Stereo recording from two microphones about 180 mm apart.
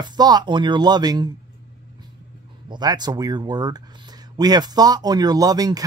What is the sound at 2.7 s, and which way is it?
Speech, 25° right (ahead or behind).